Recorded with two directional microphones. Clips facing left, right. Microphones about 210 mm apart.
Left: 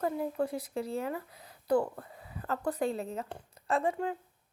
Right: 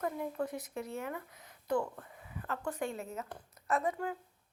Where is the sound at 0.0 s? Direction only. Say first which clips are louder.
Left 4 dB; 30° left (ahead or behind).